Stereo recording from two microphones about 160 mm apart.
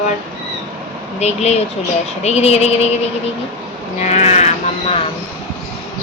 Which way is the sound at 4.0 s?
45° left (ahead or behind).